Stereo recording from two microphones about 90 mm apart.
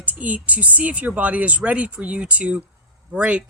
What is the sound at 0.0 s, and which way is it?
Speech, 15° right (ahead or behind).